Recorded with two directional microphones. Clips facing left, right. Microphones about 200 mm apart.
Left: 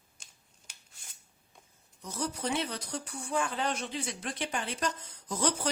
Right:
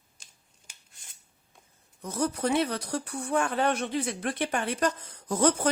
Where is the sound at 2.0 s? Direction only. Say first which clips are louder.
Right 7 dB; 55° right (ahead or behind).